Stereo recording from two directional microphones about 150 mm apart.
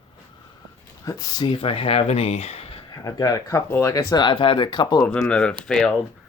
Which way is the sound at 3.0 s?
20° left (ahead or behind).